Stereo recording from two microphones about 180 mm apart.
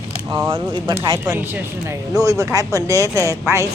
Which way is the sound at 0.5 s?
25° right (ahead or behind).